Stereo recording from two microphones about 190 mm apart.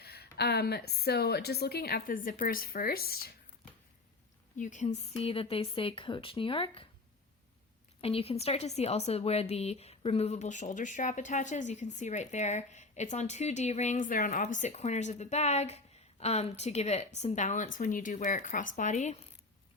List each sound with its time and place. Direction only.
0.0 s a woman's voice: 60° left (ahead or behind)
4.5 s speech: 40° left (ahead or behind)
8.0 s speech: 30° left (ahead or behind)